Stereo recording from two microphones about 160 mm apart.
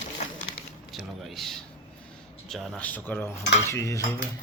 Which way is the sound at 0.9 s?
Centre (ahead or behind).